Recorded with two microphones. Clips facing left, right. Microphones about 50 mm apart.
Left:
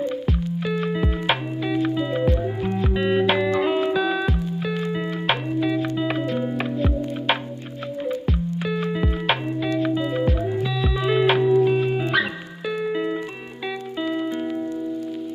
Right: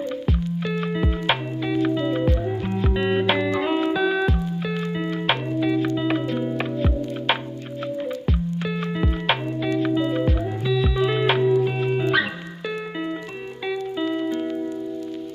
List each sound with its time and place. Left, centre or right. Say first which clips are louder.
0.3 s music: left 1 dB; centre